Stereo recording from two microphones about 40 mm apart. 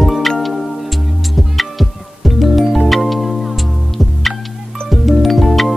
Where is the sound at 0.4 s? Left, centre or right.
Centre.